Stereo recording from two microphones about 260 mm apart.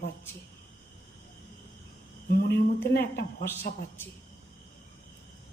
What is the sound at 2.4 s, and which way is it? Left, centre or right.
A woman's voice, left.